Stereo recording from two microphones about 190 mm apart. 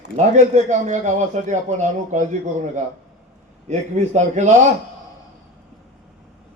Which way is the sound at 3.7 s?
40° right (ahead or behind).